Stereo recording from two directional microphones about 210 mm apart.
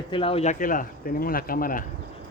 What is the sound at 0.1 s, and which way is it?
Speech, 25° left (ahead or behind).